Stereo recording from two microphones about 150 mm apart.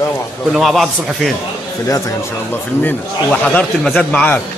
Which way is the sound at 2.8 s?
10° left (ahead or behind).